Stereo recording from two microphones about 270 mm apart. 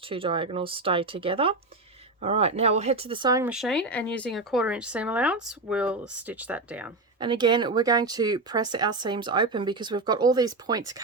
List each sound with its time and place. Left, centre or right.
0.1 s speech: centre
3.5 s speech: centre
7.2 s speech: centre